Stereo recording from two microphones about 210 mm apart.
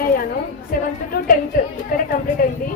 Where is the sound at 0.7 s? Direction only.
45° left (ahead or behind).